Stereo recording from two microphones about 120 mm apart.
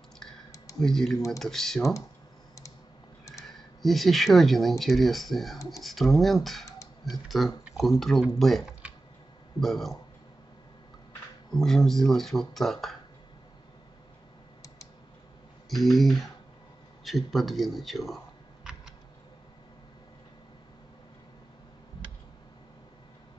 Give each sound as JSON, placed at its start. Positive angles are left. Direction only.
{"t": 0.7, "sound": "speech", "side_deg": 5}
{"t": 3.8, "sound": "speech", "side_deg": 0}
{"t": 11.5, "sound": "speech", "side_deg": 5}
{"t": 15.7, "sound": "speech", "side_deg": 0}
{"t": 17.0, "sound": "a sound", "side_deg": 0}